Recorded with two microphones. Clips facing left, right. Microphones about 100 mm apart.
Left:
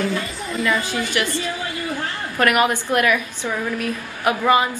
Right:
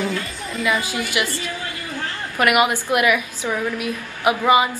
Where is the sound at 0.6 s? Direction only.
10° right (ahead or behind).